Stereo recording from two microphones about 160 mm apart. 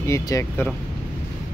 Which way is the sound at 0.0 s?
20° left (ahead or behind).